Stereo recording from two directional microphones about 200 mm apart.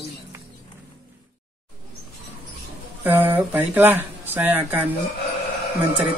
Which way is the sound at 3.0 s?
10° right (ahead or behind).